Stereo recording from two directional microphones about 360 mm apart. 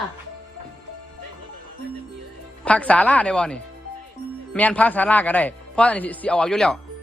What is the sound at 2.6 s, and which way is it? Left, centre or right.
Speech, centre.